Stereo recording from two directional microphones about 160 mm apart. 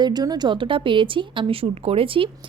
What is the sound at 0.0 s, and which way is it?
Speech, 25° right (ahead or behind).